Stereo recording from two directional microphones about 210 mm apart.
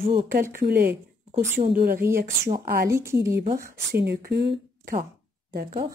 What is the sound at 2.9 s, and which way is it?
Speech, 15° right (ahead or behind).